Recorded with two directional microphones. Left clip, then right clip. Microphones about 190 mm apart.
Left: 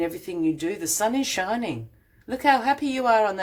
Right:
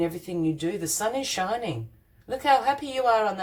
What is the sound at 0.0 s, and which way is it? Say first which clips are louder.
A woman's voice: left 1 dB; 30° left (ahead or behind).